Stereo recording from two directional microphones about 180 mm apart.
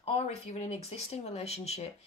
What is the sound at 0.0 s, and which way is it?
Speech, 35° left (ahead or behind).